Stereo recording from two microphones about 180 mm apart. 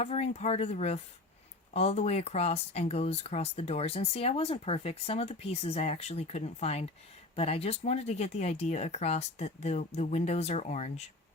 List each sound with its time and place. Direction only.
0.0 s speech: 35° left (ahead or behind)